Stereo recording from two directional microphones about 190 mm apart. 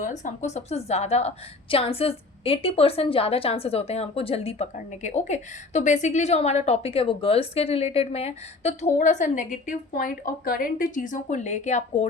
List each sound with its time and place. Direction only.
0.0 s a woman's voice: 40° left (ahead or behind)